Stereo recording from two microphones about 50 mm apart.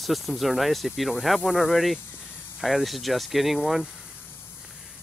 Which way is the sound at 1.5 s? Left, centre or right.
Centre.